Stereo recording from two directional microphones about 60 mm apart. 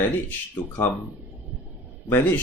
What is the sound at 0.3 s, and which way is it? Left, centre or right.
Speech, left.